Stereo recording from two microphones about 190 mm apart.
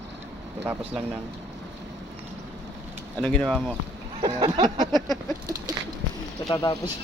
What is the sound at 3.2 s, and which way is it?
Speech, 5° left (ahead or behind).